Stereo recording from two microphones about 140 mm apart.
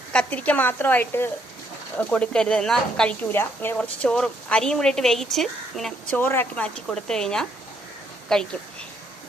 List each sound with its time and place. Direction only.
0.1 s speech: 10° left (ahead or behind)
3.3 s a woman's voice: 15° left (ahead or behind)
6.1 s a woman's voice: 15° left (ahead or behind)